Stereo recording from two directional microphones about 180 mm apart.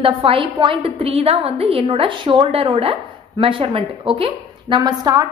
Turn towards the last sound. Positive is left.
turn(degrees=-20)  # may be behind; listen again after turning